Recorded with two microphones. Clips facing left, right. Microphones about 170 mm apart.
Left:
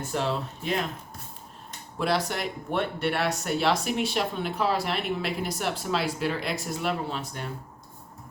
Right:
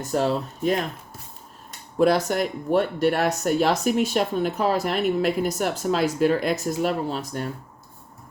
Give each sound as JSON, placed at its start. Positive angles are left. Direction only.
{"t": 0.1, "sound": "speech", "side_deg": -40}
{"t": 2.0, "sound": "speech", "side_deg": -45}